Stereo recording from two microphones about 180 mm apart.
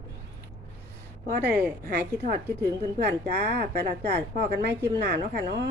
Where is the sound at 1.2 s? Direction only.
55° right (ahead or behind).